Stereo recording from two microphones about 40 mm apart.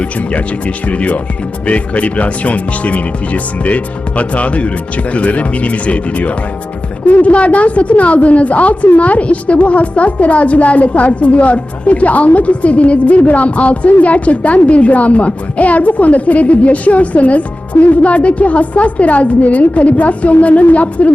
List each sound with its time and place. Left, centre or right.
0.9 s a woman's voice: left